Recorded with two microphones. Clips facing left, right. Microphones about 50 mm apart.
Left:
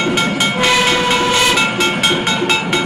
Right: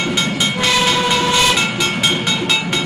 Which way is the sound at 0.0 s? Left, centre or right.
Centre.